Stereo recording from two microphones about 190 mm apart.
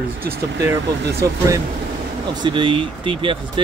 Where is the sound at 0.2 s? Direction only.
60° right (ahead or behind).